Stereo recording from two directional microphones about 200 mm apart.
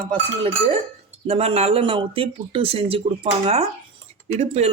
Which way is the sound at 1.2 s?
30° right (ahead or behind).